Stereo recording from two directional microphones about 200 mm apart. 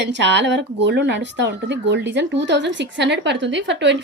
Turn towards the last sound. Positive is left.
turn(degrees=-60)  # may be behind; listen again after turning